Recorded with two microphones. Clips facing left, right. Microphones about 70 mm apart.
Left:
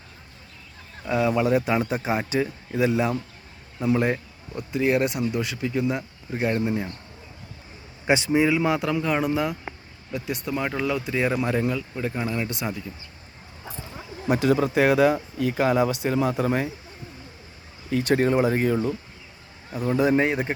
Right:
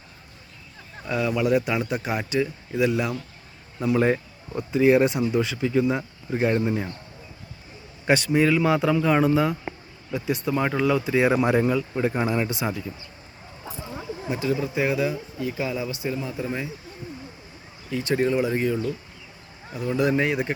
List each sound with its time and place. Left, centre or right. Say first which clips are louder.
1.0 s speech: left 3 dB; centre
1.3 s speech: right 1 dB; left
3.9 s speech: right 4 dB; centre
8.0 s a man's voice: even; centre
12.5 s speech: right 2 dB; centre
14.3 s speech: left 5 dB; left
17.9 s speech: left 2 dB; left
19.9 s speech: left 2 dB; left